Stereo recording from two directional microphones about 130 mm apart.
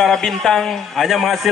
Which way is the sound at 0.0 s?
Centre (ahead or behind).